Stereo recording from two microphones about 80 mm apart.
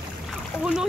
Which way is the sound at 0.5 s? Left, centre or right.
Left.